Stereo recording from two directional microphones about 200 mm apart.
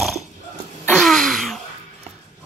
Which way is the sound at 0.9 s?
Centre (ahead or behind).